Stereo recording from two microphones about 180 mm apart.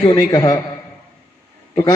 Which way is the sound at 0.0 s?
25° left (ahead or behind).